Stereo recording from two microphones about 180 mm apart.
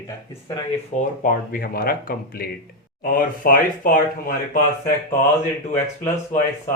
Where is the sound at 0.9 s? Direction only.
50° left (ahead or behind).